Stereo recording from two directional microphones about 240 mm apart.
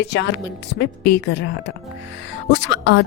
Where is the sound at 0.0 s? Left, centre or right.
Left.